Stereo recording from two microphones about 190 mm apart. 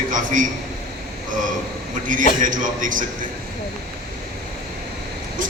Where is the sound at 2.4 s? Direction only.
45° right (ahead or behind).